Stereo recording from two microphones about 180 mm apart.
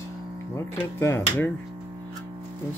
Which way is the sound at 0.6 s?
15° left (ahead or behind).